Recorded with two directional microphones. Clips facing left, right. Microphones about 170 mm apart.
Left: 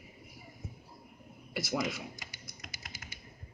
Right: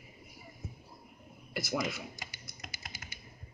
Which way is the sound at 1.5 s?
5° left (ahead or behind).